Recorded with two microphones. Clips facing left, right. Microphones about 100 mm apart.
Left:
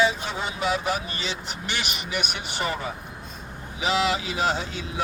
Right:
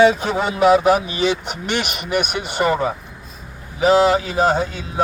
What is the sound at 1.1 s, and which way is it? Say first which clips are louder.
Speech: right 12 dB; 60° right (ahead or behind).